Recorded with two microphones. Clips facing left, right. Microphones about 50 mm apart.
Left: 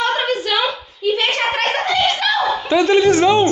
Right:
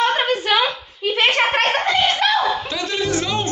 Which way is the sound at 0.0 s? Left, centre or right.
Right.